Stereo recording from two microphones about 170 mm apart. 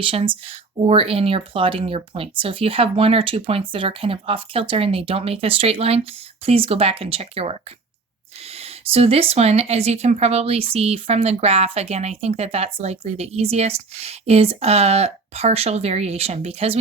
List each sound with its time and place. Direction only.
0.0 s speech: 30° right (ahead or behind)